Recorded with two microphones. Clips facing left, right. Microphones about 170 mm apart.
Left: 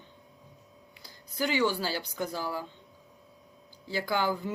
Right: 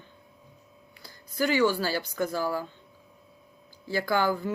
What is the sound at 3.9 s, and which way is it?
Speech, 15° left (ahead or behind).